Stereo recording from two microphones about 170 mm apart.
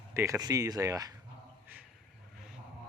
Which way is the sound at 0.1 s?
15° right (ahead or behind).